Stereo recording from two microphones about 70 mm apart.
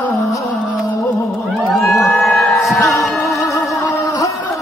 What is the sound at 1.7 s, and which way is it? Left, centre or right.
Crowd, centre.